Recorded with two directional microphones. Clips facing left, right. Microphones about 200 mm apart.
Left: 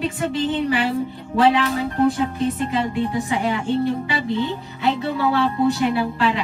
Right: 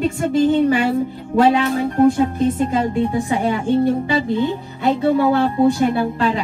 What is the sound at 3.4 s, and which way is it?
A woman's voice, 50° right (ahead or behind).